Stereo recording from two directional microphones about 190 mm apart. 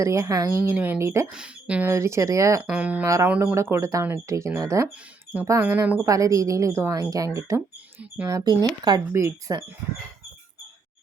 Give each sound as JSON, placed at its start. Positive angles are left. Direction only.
{"t": 0.0, "sound": "speech", "side_deg": -15}